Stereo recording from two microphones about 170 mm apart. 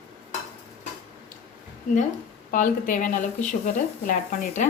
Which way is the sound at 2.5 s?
50° left (ahead or behind).